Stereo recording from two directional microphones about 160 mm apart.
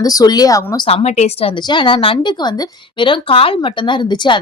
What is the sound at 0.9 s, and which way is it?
Speech, 40° left (ahead or behind).